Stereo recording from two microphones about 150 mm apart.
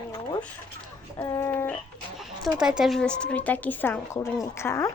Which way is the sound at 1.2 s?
20° left (ahead or behind).